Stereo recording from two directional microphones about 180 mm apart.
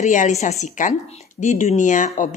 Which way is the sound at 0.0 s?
40° left (ahead or behind).